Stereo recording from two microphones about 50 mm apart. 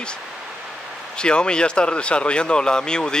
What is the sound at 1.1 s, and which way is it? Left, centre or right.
Speech, centre.